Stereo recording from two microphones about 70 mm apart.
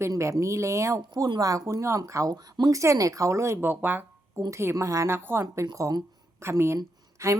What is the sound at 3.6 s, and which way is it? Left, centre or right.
Speech, right.